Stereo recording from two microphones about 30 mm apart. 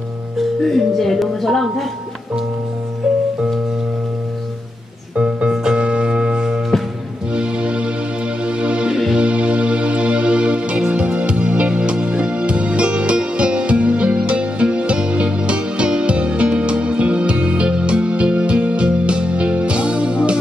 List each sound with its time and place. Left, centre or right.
0.7 s speech: centre
5.5 s music: right
5.8 s music: right